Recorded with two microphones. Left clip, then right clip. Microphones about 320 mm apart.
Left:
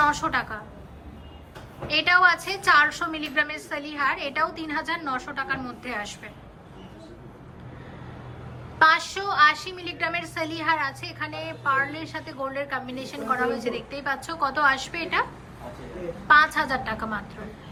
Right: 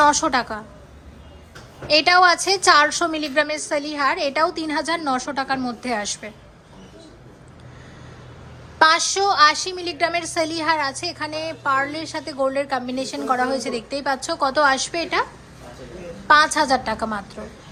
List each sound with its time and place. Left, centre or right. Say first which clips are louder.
0.0 s a woman's voice: right 6 dB; centre
1.9 s a woman's voice: right 5 dB; centre
8.8 s a woman's voice: right 4 dB; centre